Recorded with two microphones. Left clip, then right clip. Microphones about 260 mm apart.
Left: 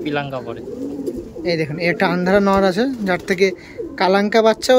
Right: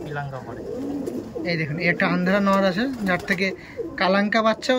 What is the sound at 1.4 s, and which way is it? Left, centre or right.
Speech, centre.